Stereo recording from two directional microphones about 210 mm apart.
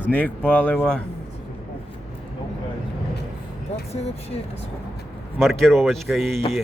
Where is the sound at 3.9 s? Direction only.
30° left (ahead or behind).